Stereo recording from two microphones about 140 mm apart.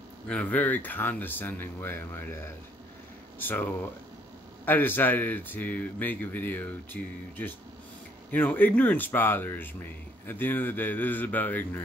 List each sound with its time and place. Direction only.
0.3 s speech: 10° left (ahead or behind)